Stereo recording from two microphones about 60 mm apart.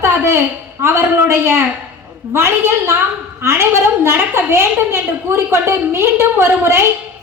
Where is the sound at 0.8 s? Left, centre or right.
Right.